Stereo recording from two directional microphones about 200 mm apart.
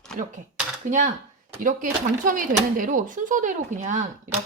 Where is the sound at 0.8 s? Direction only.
40° right (ahead or behind).